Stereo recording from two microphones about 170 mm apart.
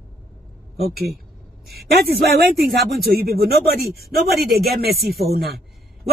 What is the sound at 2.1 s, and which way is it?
Speech, 65° right (ahead or behind).